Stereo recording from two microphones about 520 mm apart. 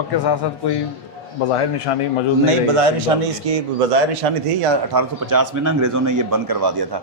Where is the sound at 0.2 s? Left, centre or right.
Left.